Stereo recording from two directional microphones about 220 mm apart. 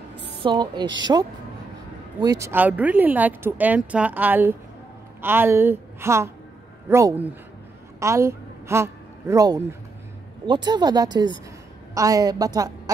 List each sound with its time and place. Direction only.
0.4 s a woman's voice: 20° right (ahead or behind)